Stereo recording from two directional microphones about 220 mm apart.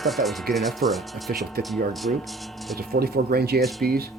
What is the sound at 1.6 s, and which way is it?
Speech, 45° right (ahead or behind).